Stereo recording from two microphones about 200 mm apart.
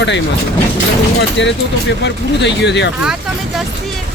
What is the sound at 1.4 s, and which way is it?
Speech, 60° left (ahead or behind).